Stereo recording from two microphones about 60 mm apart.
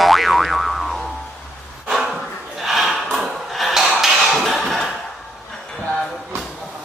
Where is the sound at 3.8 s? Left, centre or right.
Centre.